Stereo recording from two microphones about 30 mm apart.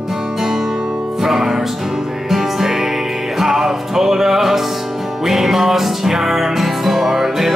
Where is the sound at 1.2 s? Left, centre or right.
Centre.